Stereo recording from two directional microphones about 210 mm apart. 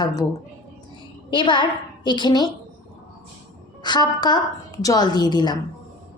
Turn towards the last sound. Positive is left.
turn(degrees=20)  # may be behind; listen again after turning